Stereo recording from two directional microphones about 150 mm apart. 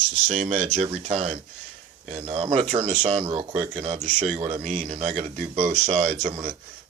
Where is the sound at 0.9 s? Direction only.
40° right (ahead or behind).